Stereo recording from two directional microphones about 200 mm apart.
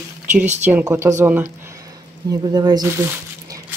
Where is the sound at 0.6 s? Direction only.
10° right (ahead or behind).